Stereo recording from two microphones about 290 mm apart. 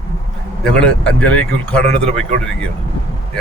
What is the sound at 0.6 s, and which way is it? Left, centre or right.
Speech, centre.